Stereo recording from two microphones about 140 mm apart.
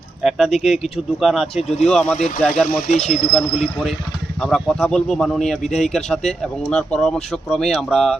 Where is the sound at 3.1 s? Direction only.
5° left (ahead or behind).